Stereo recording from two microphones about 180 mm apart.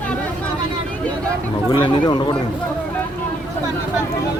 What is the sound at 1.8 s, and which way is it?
Speech, 25° left (ahead or behind).